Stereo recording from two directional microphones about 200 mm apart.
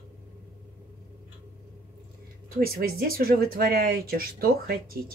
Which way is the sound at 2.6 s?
50° right (ahead or behind).